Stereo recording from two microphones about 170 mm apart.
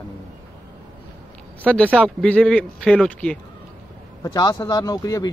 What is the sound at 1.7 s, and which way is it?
Speech, 5° left (ahead or behind).